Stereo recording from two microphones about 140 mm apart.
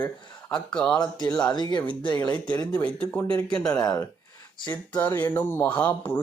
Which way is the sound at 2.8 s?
10° left (ahead or behind).